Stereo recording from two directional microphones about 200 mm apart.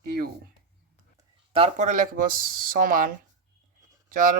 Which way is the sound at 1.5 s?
35° right (ahead or behind).